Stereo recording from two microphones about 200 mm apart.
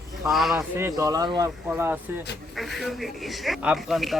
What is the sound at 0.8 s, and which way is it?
Speech, 15° right (ahead or behind).